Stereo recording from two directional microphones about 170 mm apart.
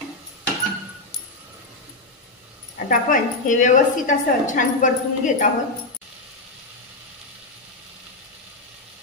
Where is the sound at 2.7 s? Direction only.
55° left (ahead or behind).